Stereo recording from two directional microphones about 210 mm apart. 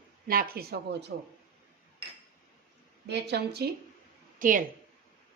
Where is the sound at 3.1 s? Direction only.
50° right (ahead or behind).